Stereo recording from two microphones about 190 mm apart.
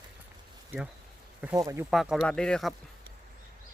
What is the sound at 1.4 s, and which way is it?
Speech, 15° right (ahead or behind).